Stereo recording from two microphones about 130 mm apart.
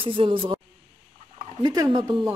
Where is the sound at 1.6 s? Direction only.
30° right (ahead or behind).